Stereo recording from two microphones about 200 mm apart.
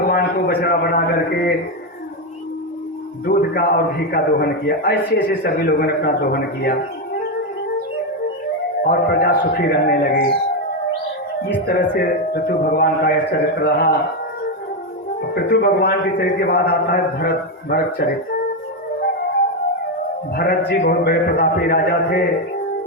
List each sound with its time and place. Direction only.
0.0 s a sound: 50° left (ahead or behind)
3.2 s a man's voice: 50° left (ahead or behind)
8.8 s a man's voice: 50° left (ahead or behind)
11.6 s a man's voice: 50° left (ahead or behind)
15.4 s a man's voice: 50° left (ahead or behind)
20.3 s a man's voice: 50° left (ahead or behind)